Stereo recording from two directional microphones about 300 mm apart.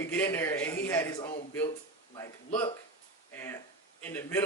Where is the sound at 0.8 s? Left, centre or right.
Centre.